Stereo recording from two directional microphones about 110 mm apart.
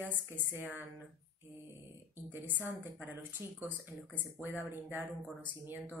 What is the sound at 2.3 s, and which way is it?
A woman's voice, 15° right (ahead or behind).